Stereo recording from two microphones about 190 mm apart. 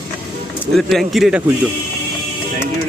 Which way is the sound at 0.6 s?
Centre (ahead or behind).